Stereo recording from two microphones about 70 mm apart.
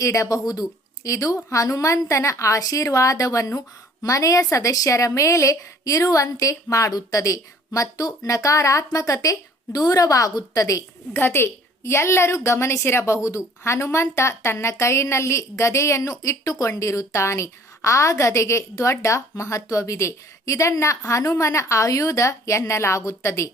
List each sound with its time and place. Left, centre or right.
0.0 s a woman's voice: left
9.7 s a woman's voice: left
11.1 s a woman's voice: left